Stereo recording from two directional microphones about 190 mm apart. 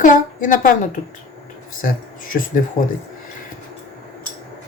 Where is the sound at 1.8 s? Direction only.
45° left (ahead or behind).